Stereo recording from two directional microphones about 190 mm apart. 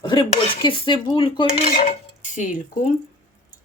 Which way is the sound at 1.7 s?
45° left (ahead or behind).